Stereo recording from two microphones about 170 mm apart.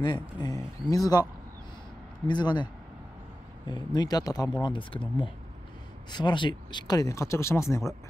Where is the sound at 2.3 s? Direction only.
25° left (ahead or behind).